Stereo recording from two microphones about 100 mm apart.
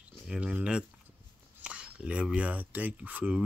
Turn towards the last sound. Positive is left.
turn(degrees=-15)  # may be behind; listen again after turning